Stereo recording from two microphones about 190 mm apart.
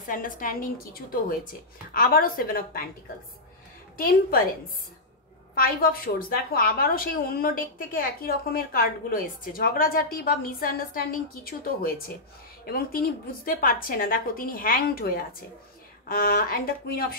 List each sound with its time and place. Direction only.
0.0 s a woman's voice: 45° left (ahead or behind)
3.9 s a woman's voice: 50° left (ahead or behind)
5.5 s a woman's voice: 50° left (ahead or behind)